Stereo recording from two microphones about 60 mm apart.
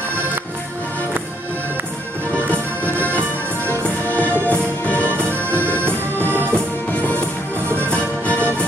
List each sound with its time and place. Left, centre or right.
2.8 s music: right
4.0 s music: left
5.1 s music: right
6.9 s music: left